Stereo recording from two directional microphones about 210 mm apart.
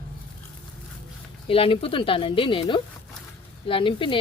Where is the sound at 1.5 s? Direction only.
25° left (ahead or behind).